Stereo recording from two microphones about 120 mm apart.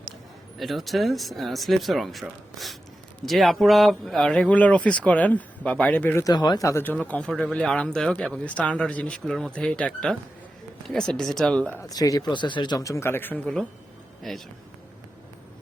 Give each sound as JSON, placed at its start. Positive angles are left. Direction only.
{"t": 0.6, "sound": "speech", "side_deg": 0}
{"t": 6.2, "sound": "speech", "side_deg": 35}
{"t": 6.8, "sound": "speech", "side_deg": 15}
{"t": 11.8, "sound": "a man's voice", "side_deg": 30}